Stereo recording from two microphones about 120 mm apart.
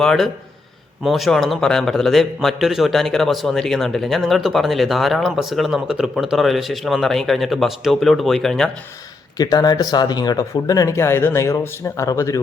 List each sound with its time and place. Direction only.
0.0 s a man's voice: 5° left (ahead or behind)
9.4 s speech: 35° left (ahead or behind)